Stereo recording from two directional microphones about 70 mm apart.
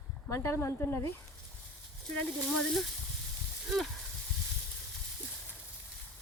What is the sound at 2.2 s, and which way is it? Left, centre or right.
Speech, centre.